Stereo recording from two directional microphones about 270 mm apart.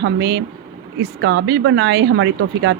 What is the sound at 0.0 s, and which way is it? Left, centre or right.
Speech, right.